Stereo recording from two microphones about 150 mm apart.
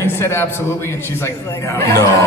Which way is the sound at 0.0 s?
15° left (ahead or behind).